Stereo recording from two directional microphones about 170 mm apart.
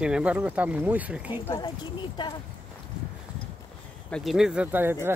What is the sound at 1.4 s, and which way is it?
Speech, 20° left (ahead or behind).